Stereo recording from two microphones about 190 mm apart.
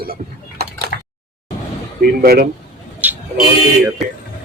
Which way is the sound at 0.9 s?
55° left (ahead or behind).